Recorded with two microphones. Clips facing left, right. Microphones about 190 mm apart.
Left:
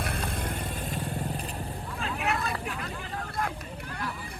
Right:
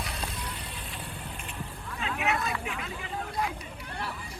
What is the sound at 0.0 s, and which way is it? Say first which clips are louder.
Vehicle: left 5 dB; 55° left (ahead or behind).